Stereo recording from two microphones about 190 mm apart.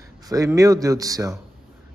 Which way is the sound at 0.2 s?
20° right (ahead or behind).